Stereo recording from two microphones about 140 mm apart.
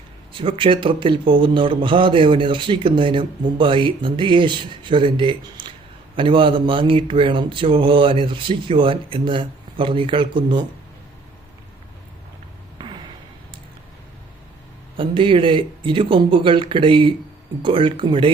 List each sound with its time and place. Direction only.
0.3 s speech: 40° right (ahead or behind)
14.9 s speech: 40° right (ahead or behind)